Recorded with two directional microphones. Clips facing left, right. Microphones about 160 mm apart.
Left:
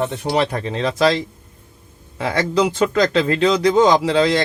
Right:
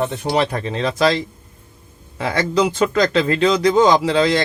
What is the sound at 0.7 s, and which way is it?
Speech, 25° left (ahead or behind).